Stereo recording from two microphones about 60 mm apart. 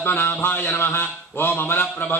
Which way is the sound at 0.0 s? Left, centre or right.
Left.